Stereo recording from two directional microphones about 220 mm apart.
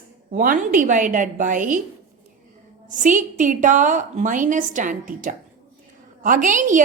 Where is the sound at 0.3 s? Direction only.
35° right (ahead or behind).